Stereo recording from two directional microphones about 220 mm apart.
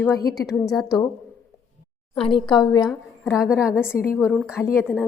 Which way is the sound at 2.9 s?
Centre (ahead or behind).